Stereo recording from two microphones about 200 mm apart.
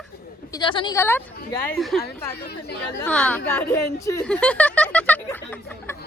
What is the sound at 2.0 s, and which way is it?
Speech, 55° left (ahead or behind).